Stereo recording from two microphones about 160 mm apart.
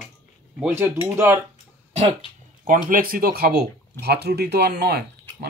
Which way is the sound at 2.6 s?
60° right (ahead or behind).